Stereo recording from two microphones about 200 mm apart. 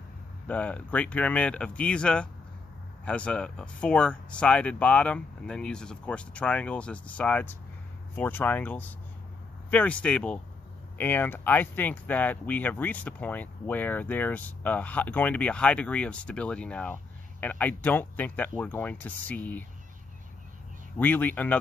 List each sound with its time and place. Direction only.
0.5 s speech: 5° left (ahead or behind)
21.0 s speech: 10° left (ahead or behind)